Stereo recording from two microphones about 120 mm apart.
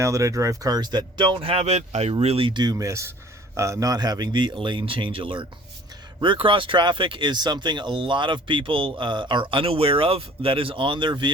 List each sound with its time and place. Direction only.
0.0 s a man's voice: 25° right (ahead or behind); by 1.6 s 50° right (ahead or behind)
1.6 s speech: 70° right (ahead or behind)
2.2 s a man's voice: 50° right (ahead or behind)